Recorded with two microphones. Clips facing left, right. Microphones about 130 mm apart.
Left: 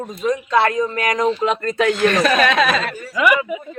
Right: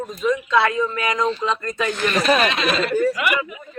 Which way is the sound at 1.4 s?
65° left (ahead or behind).